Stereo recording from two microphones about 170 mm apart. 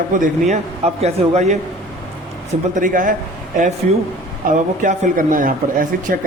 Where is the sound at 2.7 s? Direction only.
50° right (ahead or behind).